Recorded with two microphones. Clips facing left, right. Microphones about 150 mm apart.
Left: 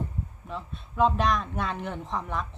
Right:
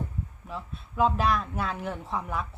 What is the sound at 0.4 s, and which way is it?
A woman's voice, 5° right (ahead or behind).